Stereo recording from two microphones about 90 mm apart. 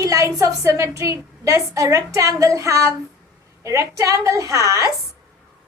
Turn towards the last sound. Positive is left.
turn(degrees=-35)  # may be behind; listen again after turning